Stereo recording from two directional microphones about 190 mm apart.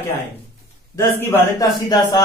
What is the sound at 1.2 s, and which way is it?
Speech, 15° left (ahead or behind).